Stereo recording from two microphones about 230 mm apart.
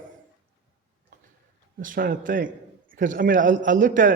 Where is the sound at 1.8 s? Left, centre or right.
Right.